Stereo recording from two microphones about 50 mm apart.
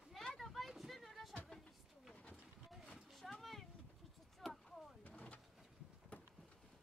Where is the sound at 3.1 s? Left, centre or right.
Centre.